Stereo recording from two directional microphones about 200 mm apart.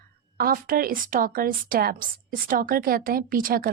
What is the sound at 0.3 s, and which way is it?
A woman's voice, 45° right (ahead or behind).